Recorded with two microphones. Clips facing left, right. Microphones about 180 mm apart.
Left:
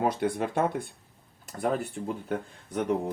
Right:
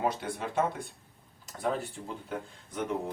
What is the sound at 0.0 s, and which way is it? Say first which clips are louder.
Speech: left 5 dB; 60° left (ahead or behind).